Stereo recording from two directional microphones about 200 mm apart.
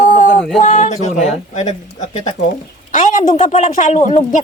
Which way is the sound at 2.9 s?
40° left (ahead or behind).